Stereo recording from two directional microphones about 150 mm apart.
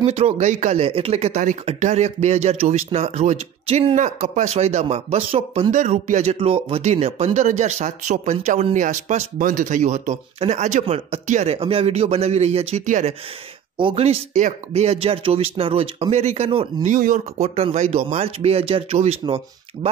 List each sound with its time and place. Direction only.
0.0 s speech: 45° right (ahead or behind)
5.7 s speech: 55° right (ahead or behind)
6.3 s speech: 40° right (ahead or behind)
13.7 s speech: 40° right (ahead or behind)
16.9 s speech: 60° right (ahead or behind)
17.6 s speech: 45° right (ahead or behind)